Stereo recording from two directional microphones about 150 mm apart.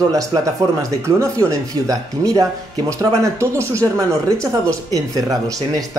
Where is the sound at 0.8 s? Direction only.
20° right (ahead or behind).